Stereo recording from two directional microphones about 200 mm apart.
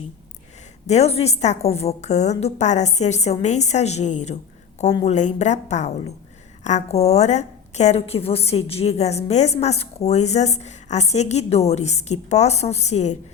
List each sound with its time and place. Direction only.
0.9 s a woman's voice: 30° left (ahead or behind)